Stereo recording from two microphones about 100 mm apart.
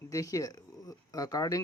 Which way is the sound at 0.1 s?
35° left (ahead or behind).